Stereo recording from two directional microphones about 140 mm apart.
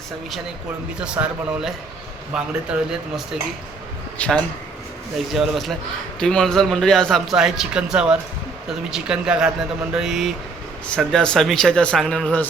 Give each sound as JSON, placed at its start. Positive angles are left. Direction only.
{"t": 0.9, "sound": "a man's voice", "side_deg": -5}
{"t": 4.2, "sound": "a man's voice", "side_deg": 5}